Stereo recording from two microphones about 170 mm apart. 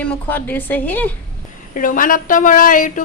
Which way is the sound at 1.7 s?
55° left (ahead or behind).